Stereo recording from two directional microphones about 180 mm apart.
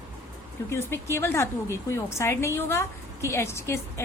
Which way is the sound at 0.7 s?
15° left (ahead or behind).